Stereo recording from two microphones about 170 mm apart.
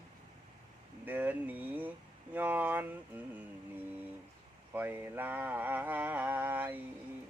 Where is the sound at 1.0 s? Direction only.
10° right (ahead or behind).